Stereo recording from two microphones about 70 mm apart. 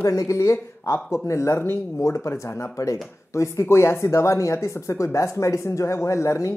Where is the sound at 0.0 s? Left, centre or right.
Left.